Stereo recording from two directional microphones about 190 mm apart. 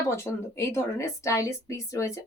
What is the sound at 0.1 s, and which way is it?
A woman's voice, 15° left (ahead or behind).